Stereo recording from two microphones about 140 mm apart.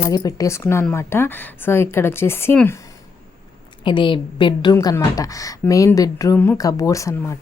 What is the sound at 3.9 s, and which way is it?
A woman's voice, 35° left (ahead or behind).